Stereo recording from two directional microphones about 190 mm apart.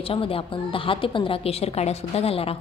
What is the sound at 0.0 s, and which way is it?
A woman's voice, 30° left (ahead or behind).